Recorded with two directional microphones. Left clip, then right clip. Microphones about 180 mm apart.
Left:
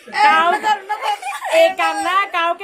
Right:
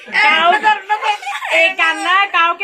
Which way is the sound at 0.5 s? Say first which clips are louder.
Right 4 dB; 60° left (ahead or behind).